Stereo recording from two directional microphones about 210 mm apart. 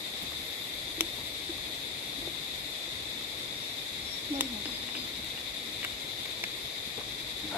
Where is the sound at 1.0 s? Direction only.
10° right (ahead or behind).